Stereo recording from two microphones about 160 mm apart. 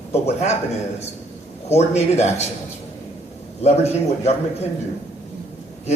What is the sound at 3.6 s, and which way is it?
Speech, 40° left (ahead or behind).